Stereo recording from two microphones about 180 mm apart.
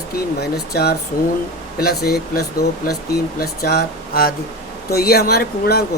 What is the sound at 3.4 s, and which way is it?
Speech, 55° left (ahead or behind).